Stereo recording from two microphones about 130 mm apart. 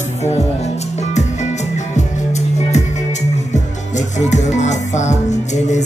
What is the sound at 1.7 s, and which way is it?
Music, 60° left (ahead or behind).